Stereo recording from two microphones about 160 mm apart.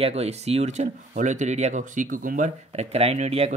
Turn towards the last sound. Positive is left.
turn(degrees=-40)  # may be behind; listen again after turning